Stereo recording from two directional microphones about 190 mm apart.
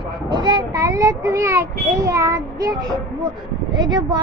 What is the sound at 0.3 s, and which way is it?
A child's voice, 25° right (ahead or behind).